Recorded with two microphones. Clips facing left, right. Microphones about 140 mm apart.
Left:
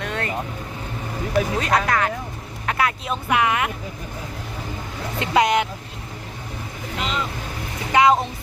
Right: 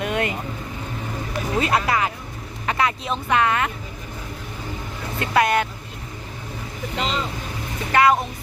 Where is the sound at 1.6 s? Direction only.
5° right (ahead or behind); by 3.7 s 10° left (ahead or behind).